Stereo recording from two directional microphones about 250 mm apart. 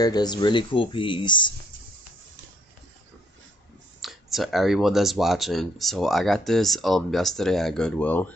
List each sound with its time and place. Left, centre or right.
0.0 s speech: centre
4.0 s speech: centre